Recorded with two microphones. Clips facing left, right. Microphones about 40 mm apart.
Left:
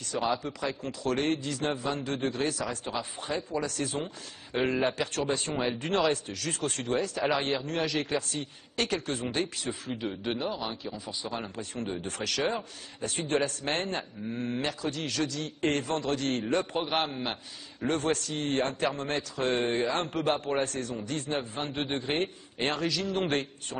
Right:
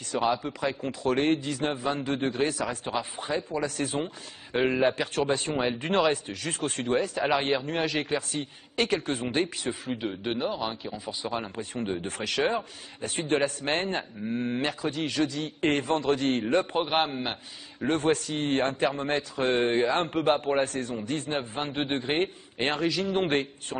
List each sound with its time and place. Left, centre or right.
0.4 s a man's voice: centre
10.0 s a man's voice: centre